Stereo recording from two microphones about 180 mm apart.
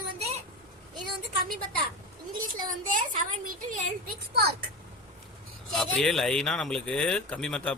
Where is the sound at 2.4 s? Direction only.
50° right (ahead or behind).